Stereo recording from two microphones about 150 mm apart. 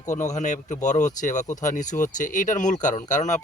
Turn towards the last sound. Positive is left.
turn(degrees=55)  # may be behind; listen again after turning